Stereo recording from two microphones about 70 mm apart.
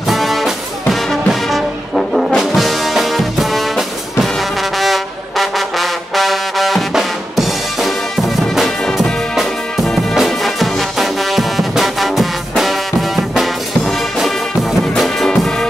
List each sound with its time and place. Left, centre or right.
0.1 s music: centre